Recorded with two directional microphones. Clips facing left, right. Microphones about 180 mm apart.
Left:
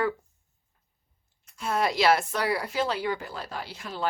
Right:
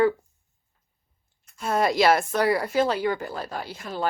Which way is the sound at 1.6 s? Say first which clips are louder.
Right 3 dB; 45° right (ahead or behind).